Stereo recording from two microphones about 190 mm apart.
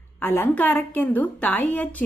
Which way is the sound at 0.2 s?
10° left (ahead or behind).